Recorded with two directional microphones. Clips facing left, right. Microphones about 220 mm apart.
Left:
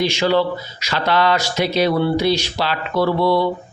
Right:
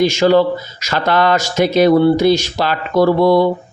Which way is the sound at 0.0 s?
45° right (ahead or behind).